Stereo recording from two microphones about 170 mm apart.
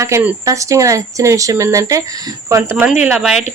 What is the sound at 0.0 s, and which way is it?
Speech, 10° right (ahead or behind).